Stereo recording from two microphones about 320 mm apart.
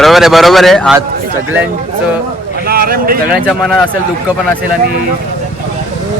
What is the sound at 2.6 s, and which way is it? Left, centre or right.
Speech, right.